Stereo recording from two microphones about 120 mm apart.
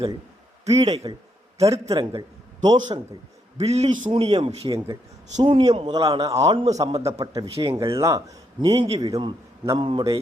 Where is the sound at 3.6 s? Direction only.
65° right (ahead or behind).